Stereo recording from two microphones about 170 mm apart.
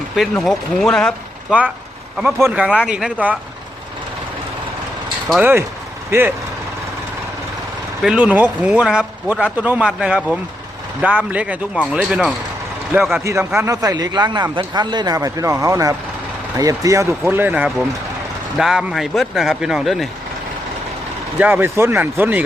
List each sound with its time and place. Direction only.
0.3 s speech: centre (ahead or behind)
2.1 s a man's voice: 5° right (ahead or behind)
5.4 s a man's voice: 10° right (ahead or behind)
8.0 s a man's voice: 5° right (ahead or behind)
21.3 s a man's voice: 10° right (ahead or behind)